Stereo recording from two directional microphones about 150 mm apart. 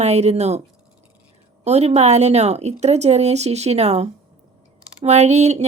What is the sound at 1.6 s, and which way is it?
Speech, 45° right (ahead or behind).